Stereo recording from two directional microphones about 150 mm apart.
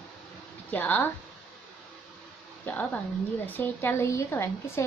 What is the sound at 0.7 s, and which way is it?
Speech, 10° left (ahead or behind).